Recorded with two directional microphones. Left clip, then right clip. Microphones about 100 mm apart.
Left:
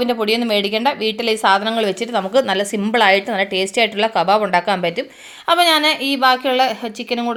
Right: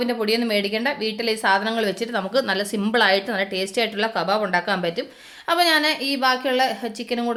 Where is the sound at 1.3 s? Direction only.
40° left (ahead or behind).